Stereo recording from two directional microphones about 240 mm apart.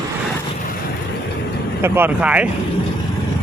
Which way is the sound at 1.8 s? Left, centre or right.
Centre.